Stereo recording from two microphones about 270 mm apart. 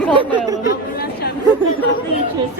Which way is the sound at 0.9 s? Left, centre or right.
Left.